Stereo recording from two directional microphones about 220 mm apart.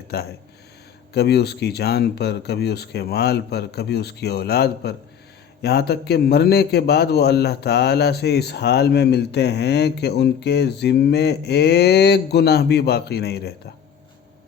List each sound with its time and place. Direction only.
0.1 s a man's voice: 45° left (ahead or behind)